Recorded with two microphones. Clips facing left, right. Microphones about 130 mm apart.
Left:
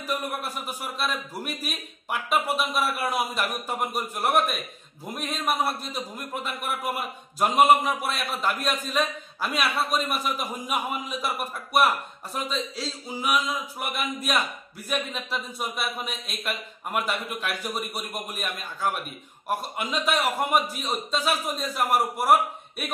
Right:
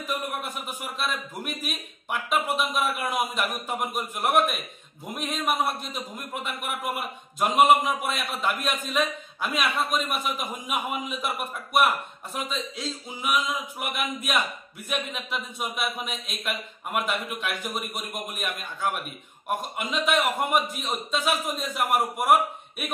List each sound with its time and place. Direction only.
0.4 s speech: centre (ahead or behind)
9.7 s a man's voice: 30° left (ahead or behind)
9.9 s a man's voice: centre (ahead or behind)